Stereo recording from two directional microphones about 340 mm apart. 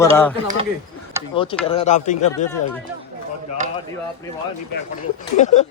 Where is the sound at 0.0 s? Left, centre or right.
Centre.